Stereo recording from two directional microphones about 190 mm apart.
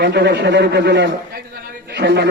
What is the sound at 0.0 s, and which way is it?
A man's voice, 60° right (ahead or behind).